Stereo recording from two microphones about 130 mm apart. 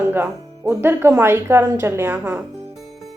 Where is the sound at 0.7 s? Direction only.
15° right (ahead or behind).